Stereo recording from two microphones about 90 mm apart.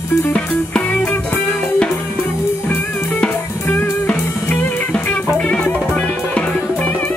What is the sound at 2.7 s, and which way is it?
Music, 20° left (ahead or behind).